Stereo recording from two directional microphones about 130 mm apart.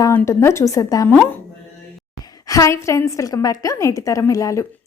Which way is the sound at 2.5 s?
25° left (ahead or behind).